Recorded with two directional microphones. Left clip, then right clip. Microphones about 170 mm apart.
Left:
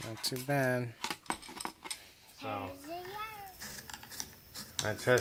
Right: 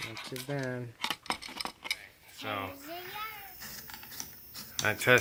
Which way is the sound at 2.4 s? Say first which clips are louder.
Right 3 dB; 20° right (ahead or behind).